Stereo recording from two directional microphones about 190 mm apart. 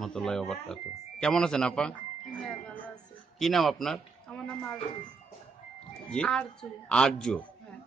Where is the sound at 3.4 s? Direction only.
Centre (ahead or behind).